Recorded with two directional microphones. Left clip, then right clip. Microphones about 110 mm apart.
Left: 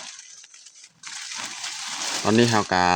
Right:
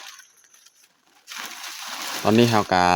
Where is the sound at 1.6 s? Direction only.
35° right (ahead or behind).